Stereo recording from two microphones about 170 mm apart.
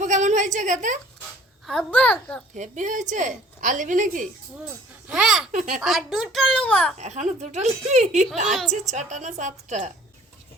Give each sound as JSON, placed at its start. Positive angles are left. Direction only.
{"t": 0.0, "sound": "a sound", "side_deg": -45}
{"t": 1.6, "sound": "a child's voice", "side_deg": 5}
{"t": 2.6, "sound": "a woman's voice", "side_deg": -45}
{"t": 4.6, "sound": "speech", "side_deg": -5}
{"t": 5.5, "sound": "a woman's voice", "side_deg": -45}
{"t": 5.8, "sound": "a child's voice", "side_deg": 0}
{"t": 7.0, "sound": "a woman's voice", "side_deg": -40}
{"t": 8.4, "sound": "a child's voice", "side_deg": 0}
{"t": 8.9, "sound": "a woman's voice", "side_deg": -45}